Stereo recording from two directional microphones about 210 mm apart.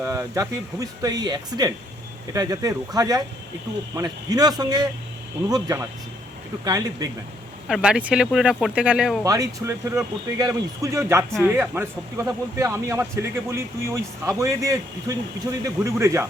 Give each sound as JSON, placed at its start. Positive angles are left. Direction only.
{"t": 0.0, "sound": "speech", "side_deg": -15}
{"t": 7.7, "sound": "speech", "side_deg": -5}
{"t": 9.2, "sound": "speech", "side_deg": -15}
{"t": 11.3, "sound": "speech", "side_deg": 0}
{"t": 11.5, "sound": "speech", "side_deg": -10}